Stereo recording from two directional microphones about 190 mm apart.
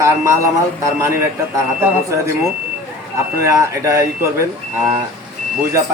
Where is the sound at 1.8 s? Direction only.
15° right (ahead or behind).